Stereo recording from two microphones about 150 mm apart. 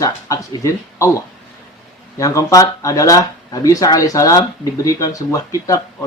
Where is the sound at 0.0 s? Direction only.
20° left (ahead or behind).